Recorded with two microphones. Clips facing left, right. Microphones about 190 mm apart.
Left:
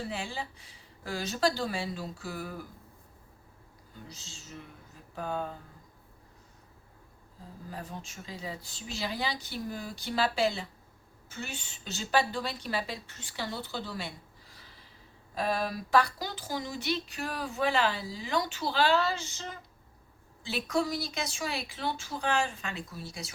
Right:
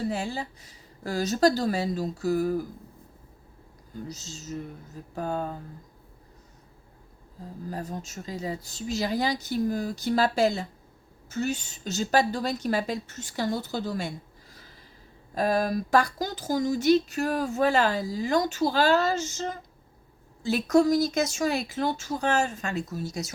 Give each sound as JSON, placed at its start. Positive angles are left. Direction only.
{"t": 0.1, "sound": "a woman's voice", "side_deg": -40}
{"t": 4.1, "sound": "a woman's voice", "side_deg": -40}
{"t": 7.7, "sound": "speech", "side_deg": -40}
{"t": 14.5, "sound": "snort", "side_deg": -45}
{"t": 15.4, "sound": "speech", "side_deg": -45}